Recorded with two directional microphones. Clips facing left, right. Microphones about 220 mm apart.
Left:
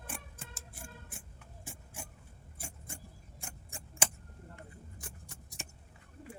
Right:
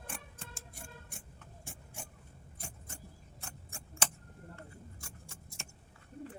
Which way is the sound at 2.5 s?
10° left (ahead or behind).